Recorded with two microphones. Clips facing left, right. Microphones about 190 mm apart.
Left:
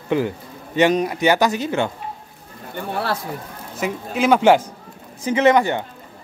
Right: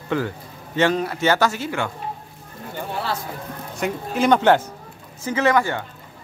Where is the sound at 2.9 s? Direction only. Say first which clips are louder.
Left 3 dB; 55° left (ahead or behind).